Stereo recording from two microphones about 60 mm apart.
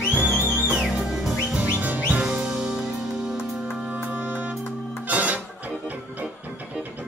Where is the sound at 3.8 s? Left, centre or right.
Right.